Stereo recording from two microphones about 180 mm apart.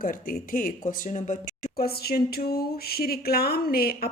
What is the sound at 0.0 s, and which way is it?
Speech, 50° left (ahead or behind).